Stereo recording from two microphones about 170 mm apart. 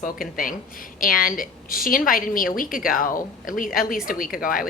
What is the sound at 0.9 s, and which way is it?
Speech, 55° left (ahead or behind).